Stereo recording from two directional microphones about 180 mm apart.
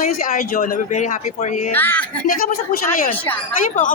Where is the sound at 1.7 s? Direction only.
10° left (ahead or behind).